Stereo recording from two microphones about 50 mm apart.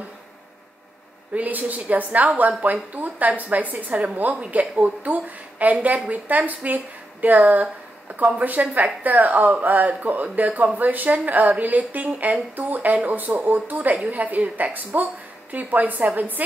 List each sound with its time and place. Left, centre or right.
1.3 s a woman's voice: right
8.2 s a woman's voice: right
8.7 s a woman's voice: right